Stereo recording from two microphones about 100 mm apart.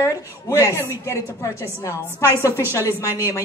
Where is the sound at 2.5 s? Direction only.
25° right (ahead or behind).